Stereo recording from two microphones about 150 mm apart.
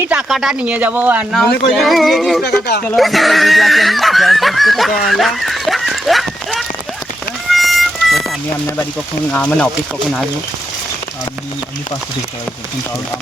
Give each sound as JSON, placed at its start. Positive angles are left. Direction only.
{"t": 0.1, "sound": "speech", "side_deg": -5}
{"t": 2.4, "sound": "speech", "side_deg": 90}
{"t": 2.8, "sound": "speech", "side_deg": 0}
{"t": 7.5, "sound": "music", "side_deg": 0}
{"t": 9.3, "sound": "speech", "side_deg": 5}